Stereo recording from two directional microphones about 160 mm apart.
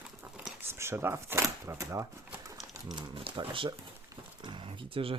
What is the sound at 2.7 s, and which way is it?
Speech, 30° right (ahead or behind).